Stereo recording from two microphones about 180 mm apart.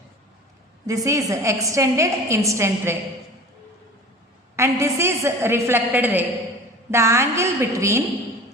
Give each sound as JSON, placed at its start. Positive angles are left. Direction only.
{"t": 0.9, "sound": "a woman's voice", "side_deg": -20}
{"t": 4.5, "sound": "a woman's voice", "side_deg": -15}